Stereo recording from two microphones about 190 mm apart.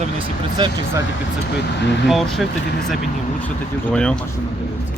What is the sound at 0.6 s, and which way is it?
Speech, 25° right (ahead or behind).